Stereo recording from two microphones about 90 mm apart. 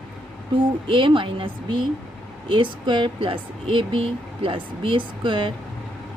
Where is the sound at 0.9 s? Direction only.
70° right (ahead or behind).